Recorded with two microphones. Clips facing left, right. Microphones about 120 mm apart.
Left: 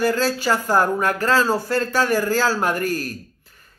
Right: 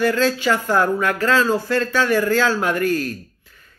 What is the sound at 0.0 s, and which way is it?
Speech, 40° left (ahead or behind).